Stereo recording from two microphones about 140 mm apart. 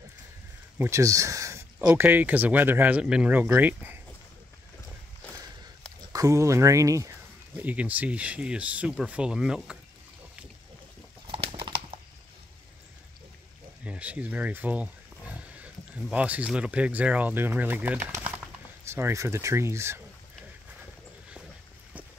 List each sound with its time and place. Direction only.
0.7 s speech: 20° right (ahead or behind)
1.8 s speech: 10° right (ahead or behind)
6.1 s speech: 20° right (ahead or behind)
7.6 s speech: 10° right (ahead or behind)
11.2 s bird: 40° right (ahead or behind)
13.8 s speech: 10° right (ahead or behind)